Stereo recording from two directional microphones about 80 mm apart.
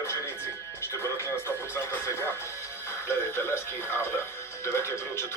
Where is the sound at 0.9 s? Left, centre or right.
Left.